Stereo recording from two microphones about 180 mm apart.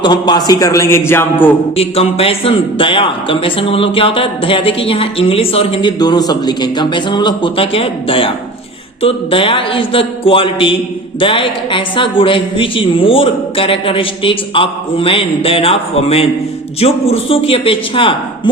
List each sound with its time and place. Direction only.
0.0 s a man's voice: 25° left (ahead or behind)
1.7 s a man's voice: 35° left (ahead or behind)